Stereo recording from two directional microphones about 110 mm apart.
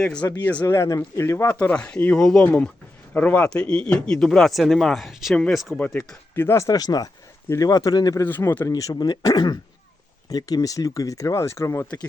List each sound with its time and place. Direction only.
0.0 s speech: 10° left (ahead or behind)
1.5 s speech: 10° left (ahead or behind)
6.3 s speech: 20° left (ahead or behind)
7.4 s speech: 25° left (ahead or behind)
7.7 s speech: 35° left (ahead or behind)
8.2 s speech: 20° left (ahead or behind)
8.7 s speech: 35° left (ahead or behind)